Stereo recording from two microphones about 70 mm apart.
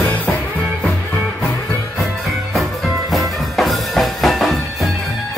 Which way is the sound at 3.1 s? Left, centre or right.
Centre.